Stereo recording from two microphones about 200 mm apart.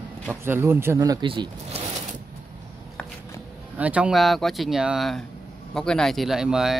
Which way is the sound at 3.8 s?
5° right (ahead or behind).